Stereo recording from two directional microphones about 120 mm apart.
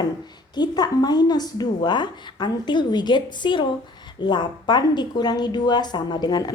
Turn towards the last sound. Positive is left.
turn(degrees=35)  # may be behind; listen again after turning